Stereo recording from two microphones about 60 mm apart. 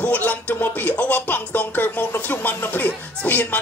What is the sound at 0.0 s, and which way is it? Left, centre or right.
Music, left.